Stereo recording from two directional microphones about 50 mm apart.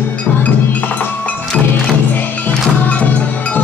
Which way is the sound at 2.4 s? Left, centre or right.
Left.